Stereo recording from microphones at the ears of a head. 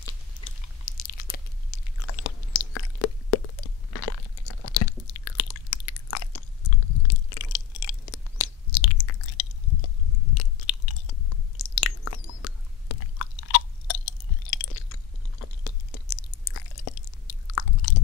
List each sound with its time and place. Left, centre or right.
0.0 s chewing: left